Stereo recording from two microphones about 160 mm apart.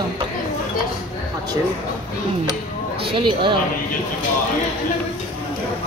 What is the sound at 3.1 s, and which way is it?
Speech, 30° right (ahead or behind).